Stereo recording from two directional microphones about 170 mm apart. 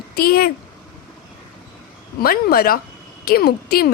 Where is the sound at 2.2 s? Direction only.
60° left (ahead or behind).